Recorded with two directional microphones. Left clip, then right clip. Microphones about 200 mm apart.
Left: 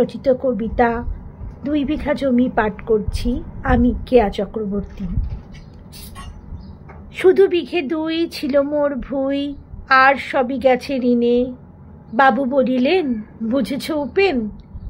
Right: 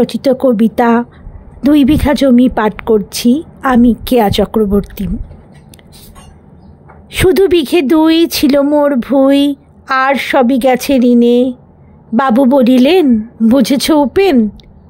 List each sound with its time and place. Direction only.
0.0 s speech: 55° right (ahead or behind)
7.1 s a woman's voice: 55° right (ahead or behind)